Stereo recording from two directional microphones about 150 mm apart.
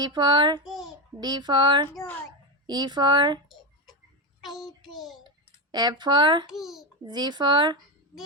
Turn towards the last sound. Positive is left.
turn(degrees=-30)  # may be behind; listen again after turning